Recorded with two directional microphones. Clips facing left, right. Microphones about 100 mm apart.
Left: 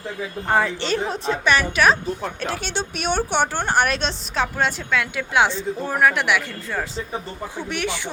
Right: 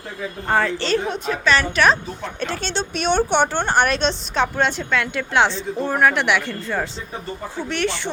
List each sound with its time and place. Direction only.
0.4 s a woman's voice: 10° left (ahead or behind)
0.9 s a woman's voice: 30° left (ahead or behind)
1.5 s a woman's voice: 10° left (ahead or behind)